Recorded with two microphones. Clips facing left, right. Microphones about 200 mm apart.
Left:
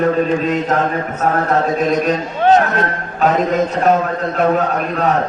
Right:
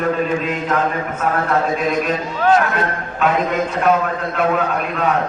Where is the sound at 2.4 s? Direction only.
20° left (ahead or behind).